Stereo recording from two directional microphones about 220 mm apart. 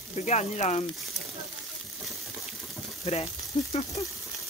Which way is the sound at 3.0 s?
30° left (ahead or behind).